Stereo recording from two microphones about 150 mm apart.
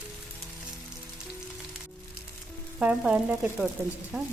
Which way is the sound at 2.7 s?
5° right (ahead or behind).